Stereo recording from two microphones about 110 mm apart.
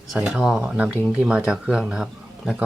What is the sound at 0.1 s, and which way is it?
Speech, 5° right (ahead or behind).